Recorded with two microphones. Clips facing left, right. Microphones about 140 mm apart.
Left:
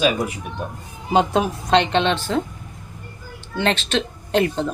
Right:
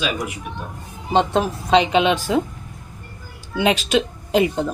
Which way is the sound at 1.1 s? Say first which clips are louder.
Even; centre (ahead or behind).